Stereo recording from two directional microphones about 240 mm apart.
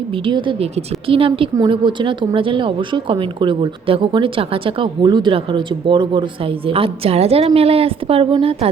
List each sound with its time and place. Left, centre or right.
0.3 s a woman's voice: centre